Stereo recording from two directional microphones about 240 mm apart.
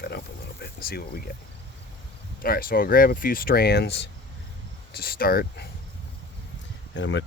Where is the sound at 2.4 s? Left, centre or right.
Left.